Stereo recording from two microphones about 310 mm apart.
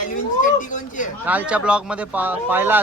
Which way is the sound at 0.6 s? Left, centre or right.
Left.